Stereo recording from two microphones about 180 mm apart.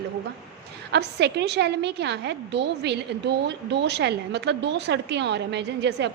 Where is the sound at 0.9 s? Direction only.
65° right (ahead or behind).